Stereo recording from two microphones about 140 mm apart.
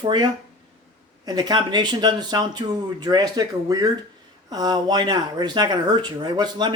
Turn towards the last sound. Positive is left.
turn(degrees=-30)  # may be behind; listen again after turning